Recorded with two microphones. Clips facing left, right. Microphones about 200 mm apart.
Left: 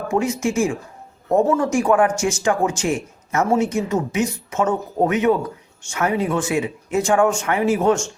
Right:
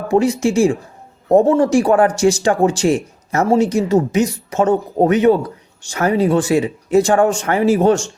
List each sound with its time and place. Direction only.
0.1 s speech: 35° right (ahead or behind)